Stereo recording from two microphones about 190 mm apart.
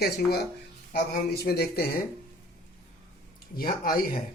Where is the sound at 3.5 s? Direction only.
50° left (ahead or behind).